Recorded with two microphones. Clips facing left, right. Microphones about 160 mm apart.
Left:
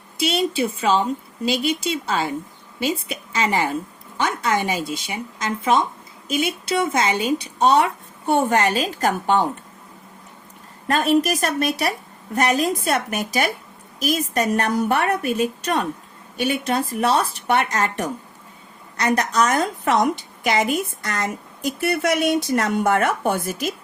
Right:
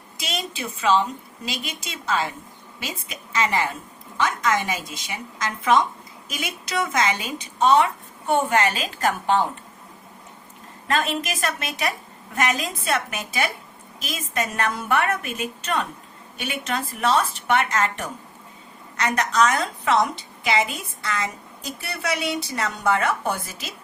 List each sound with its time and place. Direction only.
0.3 s a woman's voice: 30° left (ahead or behind)
10.9 s a woman's voice: 40° left (ahead or behind)